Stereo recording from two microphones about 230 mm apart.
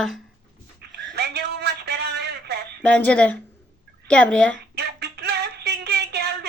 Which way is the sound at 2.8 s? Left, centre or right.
Centre.